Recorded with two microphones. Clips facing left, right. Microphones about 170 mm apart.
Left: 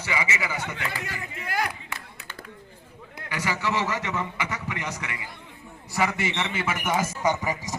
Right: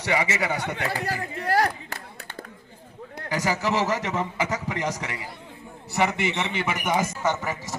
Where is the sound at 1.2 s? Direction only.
35° right (ahead or behind).